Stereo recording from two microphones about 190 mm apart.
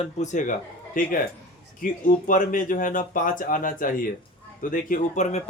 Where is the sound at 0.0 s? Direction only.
40° left (ahead or behind).